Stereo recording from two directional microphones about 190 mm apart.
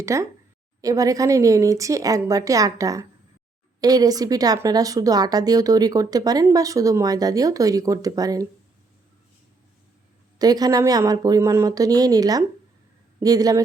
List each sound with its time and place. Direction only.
0.0 s a woman's voice: 15° right (ahead or behind)
10.3 s speech: 20° right (ahead or behind)